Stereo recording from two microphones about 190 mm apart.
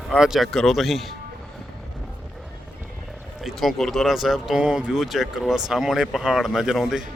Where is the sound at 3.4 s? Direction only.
Centre (ahead or behind).